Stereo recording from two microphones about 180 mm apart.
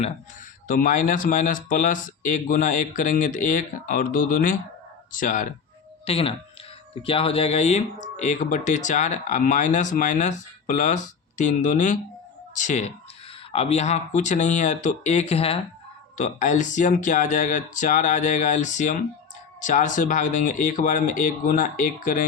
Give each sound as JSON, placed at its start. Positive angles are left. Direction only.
{"t": 0.7, "sound": "speech", "side_deg": 45}
{"t": 6.1, "sound": "speech", "side_deg": 35}
{"t": 16.1, "sound": "speech", "side_deg": 45}